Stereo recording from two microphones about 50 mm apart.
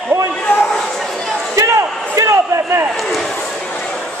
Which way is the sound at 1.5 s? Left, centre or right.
Right.